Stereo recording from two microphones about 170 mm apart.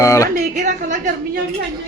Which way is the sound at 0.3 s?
55° right (ahead or behind).